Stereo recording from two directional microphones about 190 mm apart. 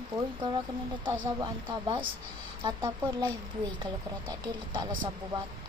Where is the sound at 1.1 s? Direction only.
20° right (ahead or behind).